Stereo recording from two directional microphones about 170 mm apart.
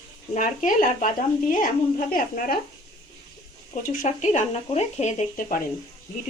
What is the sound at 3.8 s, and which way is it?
Speech, 50° left (ahead or behind).